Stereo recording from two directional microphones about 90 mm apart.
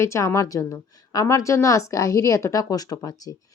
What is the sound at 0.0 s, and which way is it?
A woman's voice, 30° left (ahead or behind).